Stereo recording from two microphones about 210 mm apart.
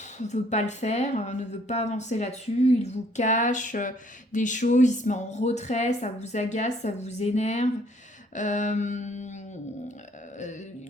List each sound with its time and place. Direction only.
0.2 s speech: 35° left (ahead or behind)